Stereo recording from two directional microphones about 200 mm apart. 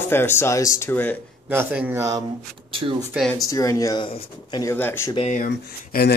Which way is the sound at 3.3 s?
15° left (ahead or behind).